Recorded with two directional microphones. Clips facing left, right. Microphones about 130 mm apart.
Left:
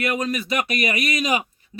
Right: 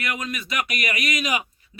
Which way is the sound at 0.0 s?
30° left (ahead or behind).